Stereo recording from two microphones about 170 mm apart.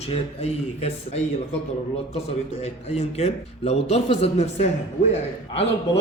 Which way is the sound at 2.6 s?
40° left (ahead or behind).